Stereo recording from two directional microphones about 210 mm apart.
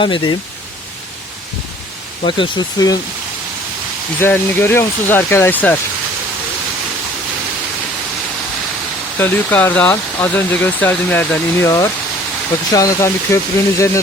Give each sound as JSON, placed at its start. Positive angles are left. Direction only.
{"t": 0.0, "sound": "speech", "side_deg": 25}
{"t": 2.2, "sound": "speech", "side_deg": 20}
{"t": 4.2, "sound": "speech", "side_deg": 10}
{"t": 9.1, "sound": "speech", "side_deg": 10}